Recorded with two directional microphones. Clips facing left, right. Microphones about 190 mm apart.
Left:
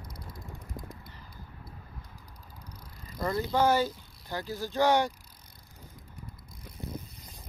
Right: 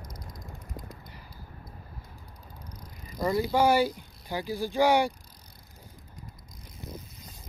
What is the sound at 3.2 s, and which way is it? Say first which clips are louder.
Speech: right 2 dB; 10° right (ahead or behind).